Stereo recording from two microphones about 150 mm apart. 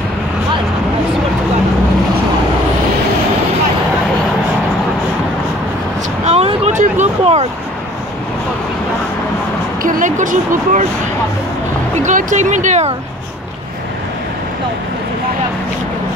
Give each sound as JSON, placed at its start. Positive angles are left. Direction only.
{"t": 6.2, "sound": "vehicle", "side_deg": -45}
{"t": 9.8, "sound": "a sound", "side_deg": -60}
{"t": 12.0, "sound": "speech", "side_deg": -55}